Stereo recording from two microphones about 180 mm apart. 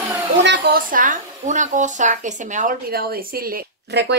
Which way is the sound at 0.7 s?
50° right (ahead or behind).